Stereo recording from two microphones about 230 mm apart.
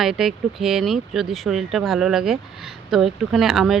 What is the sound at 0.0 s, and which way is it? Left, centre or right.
Speech, centre.